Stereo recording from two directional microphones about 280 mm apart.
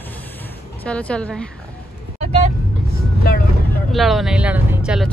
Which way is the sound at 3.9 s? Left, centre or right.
Centre.